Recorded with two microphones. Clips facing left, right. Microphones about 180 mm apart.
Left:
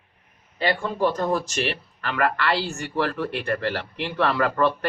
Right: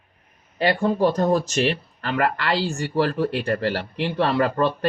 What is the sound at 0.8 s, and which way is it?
Speech, 40° right (ahead or behind).